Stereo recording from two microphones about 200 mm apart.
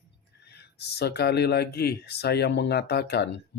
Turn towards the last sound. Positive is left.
turn(degrees=55)  # may be behind; listen again after turning